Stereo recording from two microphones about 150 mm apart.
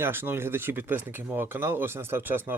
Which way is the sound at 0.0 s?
15° right (ahead or behind).